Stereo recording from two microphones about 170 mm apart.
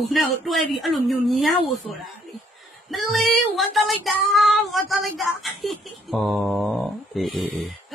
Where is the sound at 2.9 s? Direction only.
Centre (ahead or behind).